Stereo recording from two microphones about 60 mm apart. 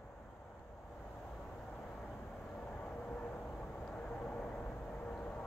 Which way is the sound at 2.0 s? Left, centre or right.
Centre.